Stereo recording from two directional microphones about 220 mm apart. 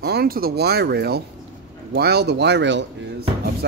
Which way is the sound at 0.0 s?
45° right (ahead or behind).